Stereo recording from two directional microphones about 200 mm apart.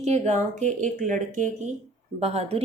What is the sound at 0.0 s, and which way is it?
A woman's voice, 35° right (ahead or behind).